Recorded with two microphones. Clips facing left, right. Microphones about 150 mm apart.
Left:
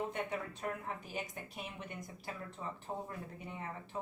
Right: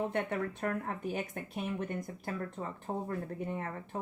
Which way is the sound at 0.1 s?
55° right (ahead or behind).